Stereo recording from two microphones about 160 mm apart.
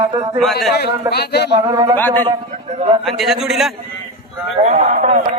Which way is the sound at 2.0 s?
10° left (ahead or behind).